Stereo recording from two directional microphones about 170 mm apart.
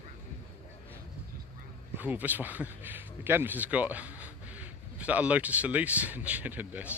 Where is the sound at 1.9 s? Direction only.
10° right (ahead or behind).